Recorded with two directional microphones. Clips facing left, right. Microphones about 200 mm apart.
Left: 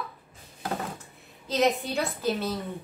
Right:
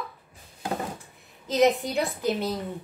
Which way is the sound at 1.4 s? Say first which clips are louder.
Right 3 dB; 15° right (ahead or behind).